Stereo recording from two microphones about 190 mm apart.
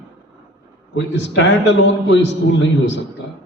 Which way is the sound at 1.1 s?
70° left (ahead or behind).